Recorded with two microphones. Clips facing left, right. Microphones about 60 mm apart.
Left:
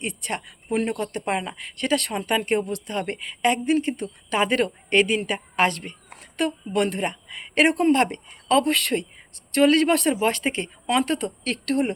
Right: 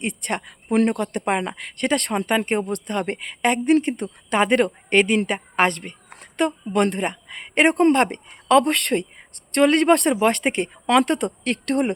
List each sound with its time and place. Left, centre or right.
0.0 s speech: right